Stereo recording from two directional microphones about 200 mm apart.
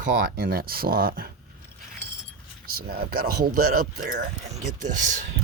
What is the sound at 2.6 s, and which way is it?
Speech, 50° right (ahead or behind).